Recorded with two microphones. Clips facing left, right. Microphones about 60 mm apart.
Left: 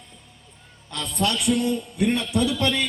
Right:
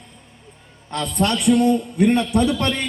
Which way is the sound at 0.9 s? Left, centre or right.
Right.